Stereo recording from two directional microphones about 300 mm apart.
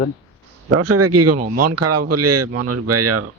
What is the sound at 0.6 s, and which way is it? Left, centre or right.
Speech, right.